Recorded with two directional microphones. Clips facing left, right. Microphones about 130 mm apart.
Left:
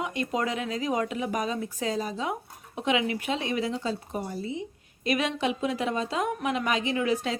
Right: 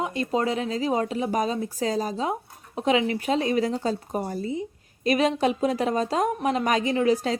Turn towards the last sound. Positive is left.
turn(degrees=-35)  # may be behind; listen again after turning